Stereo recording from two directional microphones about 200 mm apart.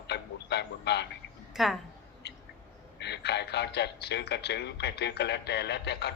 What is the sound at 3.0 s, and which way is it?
A man's voice, 55° left (ahead or behind).